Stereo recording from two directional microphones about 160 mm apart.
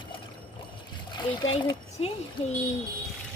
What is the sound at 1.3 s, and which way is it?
Speech, 25° left (ahead or behind).